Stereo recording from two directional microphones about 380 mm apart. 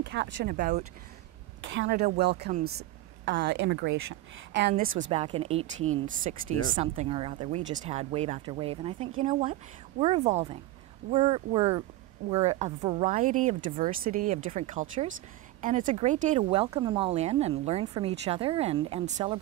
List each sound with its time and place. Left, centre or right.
0.0 s a woman's voice: right